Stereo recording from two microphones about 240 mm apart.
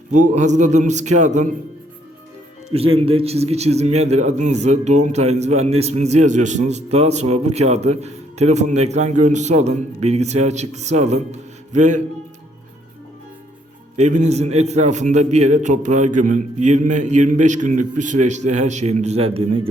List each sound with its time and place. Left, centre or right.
0.1 s a man's voice: right
2.7 s a man's voice: right
13.9 s a man's voice: right